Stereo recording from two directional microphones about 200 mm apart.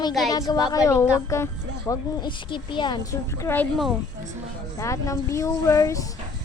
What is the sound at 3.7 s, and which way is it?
Speech, centre (ahead or behind).